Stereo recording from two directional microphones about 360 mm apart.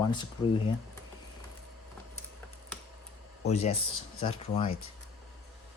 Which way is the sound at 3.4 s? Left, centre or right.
Centre.